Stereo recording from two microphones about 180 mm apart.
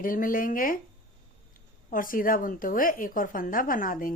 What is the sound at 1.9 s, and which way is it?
Speech, 50° left (ahead or behind).